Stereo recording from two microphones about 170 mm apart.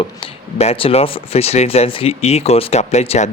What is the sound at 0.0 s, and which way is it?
Speech, 35° left (ahead or behind).